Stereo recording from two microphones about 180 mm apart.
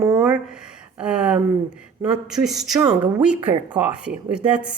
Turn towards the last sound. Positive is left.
turn(degrees=-5)  # may be behind; listen again after turning